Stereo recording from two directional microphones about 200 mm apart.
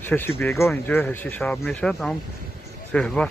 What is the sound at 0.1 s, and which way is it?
Speech, 10° left (ahead or behind).